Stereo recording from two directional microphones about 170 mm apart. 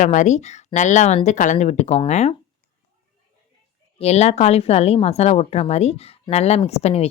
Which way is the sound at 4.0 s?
40° left (ahead or behind).